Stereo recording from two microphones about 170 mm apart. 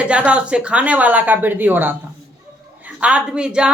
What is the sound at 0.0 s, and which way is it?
Speech, 5° right (ahead or behind).